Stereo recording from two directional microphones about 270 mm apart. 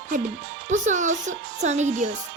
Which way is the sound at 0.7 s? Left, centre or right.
Right.